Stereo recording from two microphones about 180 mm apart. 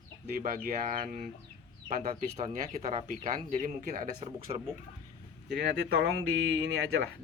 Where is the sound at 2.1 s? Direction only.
40° right (ahead or behind).